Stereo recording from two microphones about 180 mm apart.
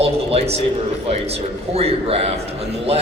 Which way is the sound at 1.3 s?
35° right (ahead or behind).